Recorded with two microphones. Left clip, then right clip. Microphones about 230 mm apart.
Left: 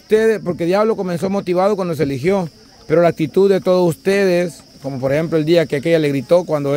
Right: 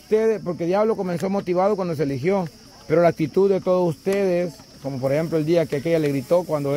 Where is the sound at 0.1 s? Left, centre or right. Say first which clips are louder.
Left 6 dB; left.